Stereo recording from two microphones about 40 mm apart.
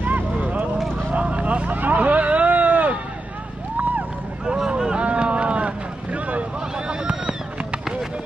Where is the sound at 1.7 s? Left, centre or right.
Right.